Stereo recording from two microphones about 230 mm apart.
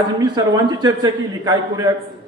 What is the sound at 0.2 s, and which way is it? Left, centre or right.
Speech, centre.